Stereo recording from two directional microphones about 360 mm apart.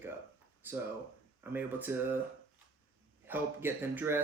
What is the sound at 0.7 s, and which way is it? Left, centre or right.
Speech, centre.